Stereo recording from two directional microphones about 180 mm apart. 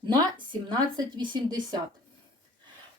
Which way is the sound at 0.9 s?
25° right (ahead or behind).